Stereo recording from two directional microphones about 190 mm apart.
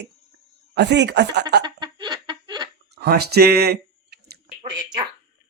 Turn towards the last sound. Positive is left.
turn(degrees=-25)  # may be behind; listen again after turning